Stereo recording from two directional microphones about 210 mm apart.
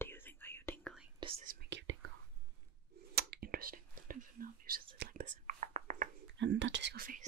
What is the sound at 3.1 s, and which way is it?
Whispering, 45° right (ahead or behind).